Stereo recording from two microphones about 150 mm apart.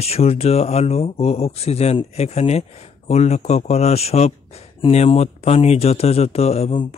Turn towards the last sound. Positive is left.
turn(degrees=45)  # may be behind; listen again after turning